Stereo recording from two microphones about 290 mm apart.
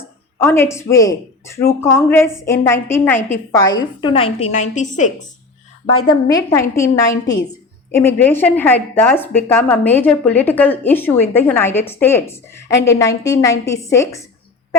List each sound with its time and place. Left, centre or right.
0.3 s a woman's voice: centre; by 5.3 s left
6.1 s speech: centre